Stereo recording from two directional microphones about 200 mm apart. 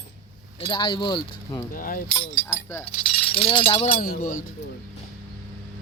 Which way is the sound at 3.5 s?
25° left (ahead or behind).